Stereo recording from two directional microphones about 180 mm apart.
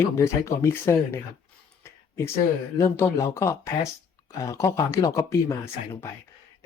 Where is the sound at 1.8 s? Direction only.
15° left (ahead or behind).